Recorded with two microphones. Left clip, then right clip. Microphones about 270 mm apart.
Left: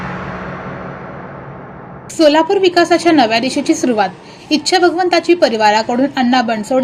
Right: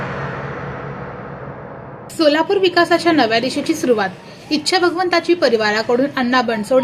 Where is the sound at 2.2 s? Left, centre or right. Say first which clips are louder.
Left 4 dB; centre.